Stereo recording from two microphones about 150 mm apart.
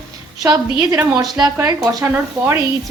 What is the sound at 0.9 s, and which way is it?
A woman's voice, 20° right (ahead or behind).